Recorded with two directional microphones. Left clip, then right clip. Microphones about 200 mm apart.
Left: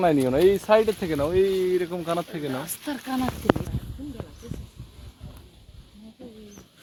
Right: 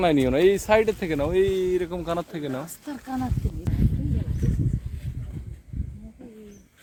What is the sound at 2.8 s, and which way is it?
Speech, 35° left (ahead or behind).